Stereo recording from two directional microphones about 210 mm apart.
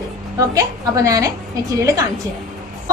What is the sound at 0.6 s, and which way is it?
Speech, 15° right (ahead or behind).